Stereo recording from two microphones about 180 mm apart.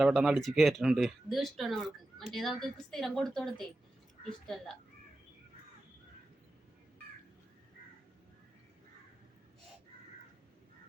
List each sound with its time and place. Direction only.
0.0 s speech: 5° right (ahead or behind)